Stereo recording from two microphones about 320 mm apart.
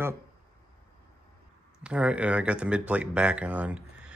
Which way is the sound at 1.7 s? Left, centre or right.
Centre.